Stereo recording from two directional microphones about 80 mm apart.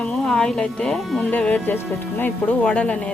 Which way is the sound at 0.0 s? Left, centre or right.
Centre.